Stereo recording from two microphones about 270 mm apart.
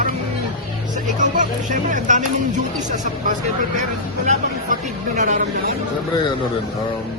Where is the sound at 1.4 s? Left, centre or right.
Right.